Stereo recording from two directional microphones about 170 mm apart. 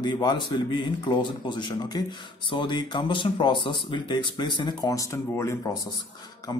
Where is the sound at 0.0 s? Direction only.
25° left (ahead or behind).